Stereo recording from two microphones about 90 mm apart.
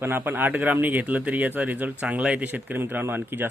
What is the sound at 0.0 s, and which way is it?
Speech, 25° right (ahead or behind).